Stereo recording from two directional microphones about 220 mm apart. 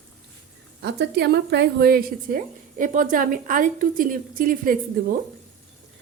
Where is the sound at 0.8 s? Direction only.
50° right (ahead or behind).